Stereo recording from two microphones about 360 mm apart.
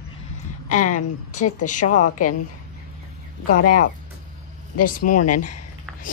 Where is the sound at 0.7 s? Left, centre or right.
Left.